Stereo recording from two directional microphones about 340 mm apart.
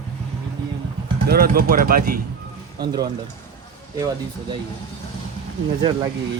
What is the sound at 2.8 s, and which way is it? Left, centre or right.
Speech, centre.